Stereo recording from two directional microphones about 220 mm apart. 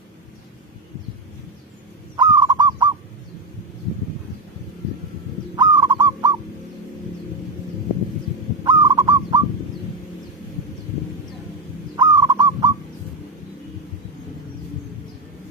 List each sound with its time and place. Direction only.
2.1 s bird: 20° right (ahead or behind)
5.5 s owl: 20° right (ahead or behind)
8.6 s owl: 20° right (ahead or behind)
11.9 s bird: 15° right (ahead or behind)